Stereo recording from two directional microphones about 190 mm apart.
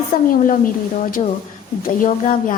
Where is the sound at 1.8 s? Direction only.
45° left (ahead or behind).